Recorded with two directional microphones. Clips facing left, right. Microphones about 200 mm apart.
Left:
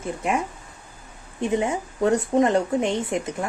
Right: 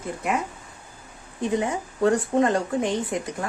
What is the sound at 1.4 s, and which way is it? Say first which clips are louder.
Speech: left 1 dB; 20° left (ahead or behind).